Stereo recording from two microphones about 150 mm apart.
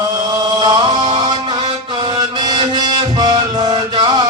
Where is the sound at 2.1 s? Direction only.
30° right (ahead or behind).